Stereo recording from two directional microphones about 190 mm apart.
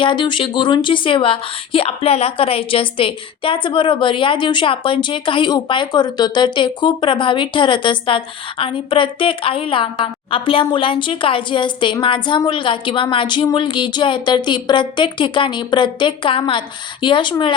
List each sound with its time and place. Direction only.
0.0 s speech: 25° left (ahead or behind)